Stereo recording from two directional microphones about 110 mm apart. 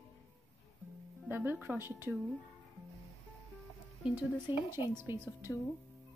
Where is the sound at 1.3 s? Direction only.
20° right (ahead or behind).